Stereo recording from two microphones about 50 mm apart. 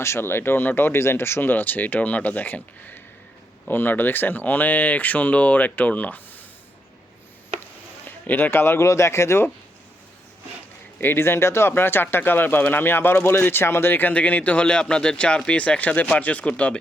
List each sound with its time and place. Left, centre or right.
0.0 s speech: left
8.0 s speech: left
8.8 s speech: left
10.9 s speech: left
11.7 s speech: left
14.1 s speech: left